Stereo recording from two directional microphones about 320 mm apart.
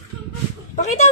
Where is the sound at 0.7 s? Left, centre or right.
Left.